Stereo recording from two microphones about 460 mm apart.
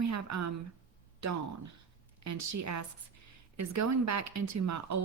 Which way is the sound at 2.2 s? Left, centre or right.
Right.